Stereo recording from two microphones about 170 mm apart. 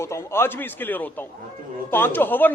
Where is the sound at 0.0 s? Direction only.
15° left (ahead or behind).